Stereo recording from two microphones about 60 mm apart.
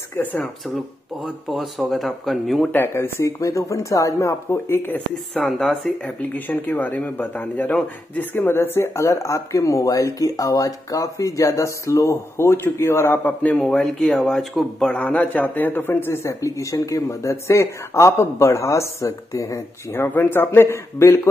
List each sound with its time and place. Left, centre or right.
0.1 s speech: left
1.2 s speech: centre
2.9 s speech: left
3.3 s speech: left
5.3 s speech: centre
6.2 s a man's voice: left
8.4 s speech: left
13.4 s speech: left
13.7 s speech: centre
14.3 s speech: centre
14.9 s a man's voice: left
16.1 s speech: left
19.9 s a man's voice: left